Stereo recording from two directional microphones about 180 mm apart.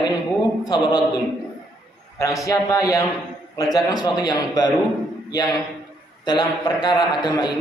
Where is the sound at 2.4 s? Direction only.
20° left (ahead or behind).